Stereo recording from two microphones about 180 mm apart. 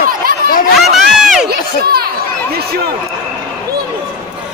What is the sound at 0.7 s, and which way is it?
Crowd, centre (ahead or behind).